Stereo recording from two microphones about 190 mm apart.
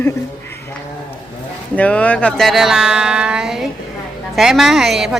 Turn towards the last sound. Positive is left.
turn(degrees=0)  # may be behind; listen again after turning